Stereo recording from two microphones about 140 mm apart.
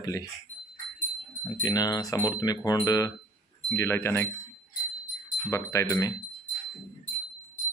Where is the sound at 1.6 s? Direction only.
25° left (ahead or behind).